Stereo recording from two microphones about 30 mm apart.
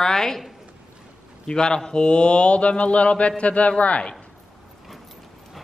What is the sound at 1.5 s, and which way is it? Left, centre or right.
Speech, left.